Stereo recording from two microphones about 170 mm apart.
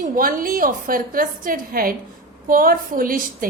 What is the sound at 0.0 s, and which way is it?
A woman's voice, 55° right (ahead or behind).